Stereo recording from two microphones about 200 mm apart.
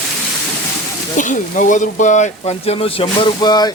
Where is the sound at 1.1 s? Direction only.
40° left (ahead or behind).